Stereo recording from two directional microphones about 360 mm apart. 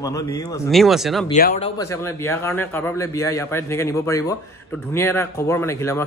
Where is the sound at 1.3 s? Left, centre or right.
Left.